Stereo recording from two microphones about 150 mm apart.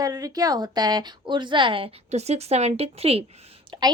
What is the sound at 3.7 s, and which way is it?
Speech, 30° right (ahead or behind).